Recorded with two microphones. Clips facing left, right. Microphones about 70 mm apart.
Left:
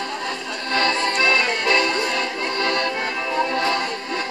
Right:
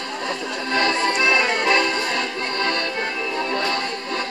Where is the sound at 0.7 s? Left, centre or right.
Centre.